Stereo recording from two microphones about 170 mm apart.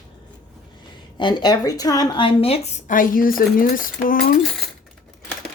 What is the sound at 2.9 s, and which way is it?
Speech, 55° left (ahead or behind).